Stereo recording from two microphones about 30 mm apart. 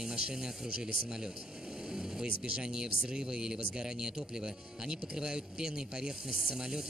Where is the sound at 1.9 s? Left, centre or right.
Centre.